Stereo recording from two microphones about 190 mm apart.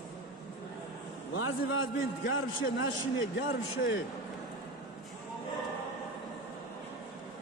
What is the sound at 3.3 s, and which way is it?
Speech, 75° left (ahead or behind).